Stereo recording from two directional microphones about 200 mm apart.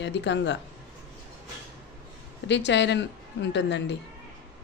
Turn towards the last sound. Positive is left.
turn(degrees=60)  # may be behind; listen again after turning